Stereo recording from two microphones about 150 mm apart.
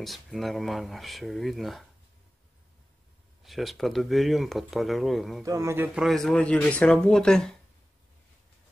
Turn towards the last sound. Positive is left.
turn(degrees=5)  # may be behind; listen again after turning